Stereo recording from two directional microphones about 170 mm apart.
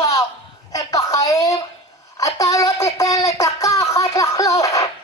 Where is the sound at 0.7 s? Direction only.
20° left (ahead or behind).